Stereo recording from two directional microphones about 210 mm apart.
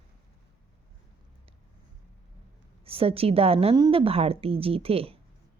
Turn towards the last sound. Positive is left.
turn(degrees=-25)  # may be behind; listen again after turning